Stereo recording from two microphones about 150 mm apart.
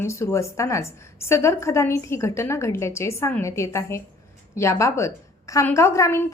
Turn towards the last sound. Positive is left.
turn(degrees=20)  # may be behind; listen again after turning